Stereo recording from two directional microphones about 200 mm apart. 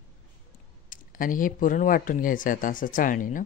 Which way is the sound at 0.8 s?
40° left (ahead or behind).